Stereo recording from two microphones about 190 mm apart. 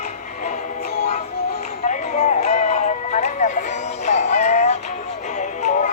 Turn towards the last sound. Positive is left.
turn(degrees=40)  # may be behind; listen again after turning